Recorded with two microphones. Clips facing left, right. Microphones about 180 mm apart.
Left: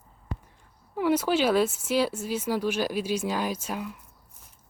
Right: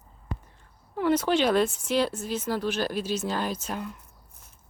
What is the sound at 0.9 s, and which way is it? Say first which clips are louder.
Speech: even; 10° left (ahead or behind).